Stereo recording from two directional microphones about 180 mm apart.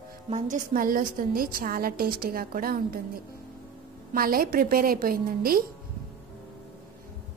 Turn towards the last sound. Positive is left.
turn(degrees=-55)  # may be behind; listen again after turning